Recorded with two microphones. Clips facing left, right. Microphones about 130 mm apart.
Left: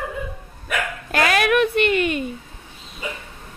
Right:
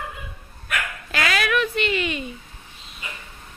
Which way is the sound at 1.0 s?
50° left (ahead or behind).